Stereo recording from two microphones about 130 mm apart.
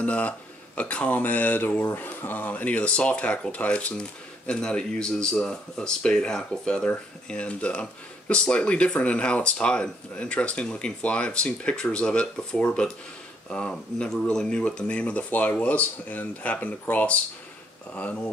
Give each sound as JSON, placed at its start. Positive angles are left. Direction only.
{"t": 0.0, "sound": "speech", "side_deg": 10}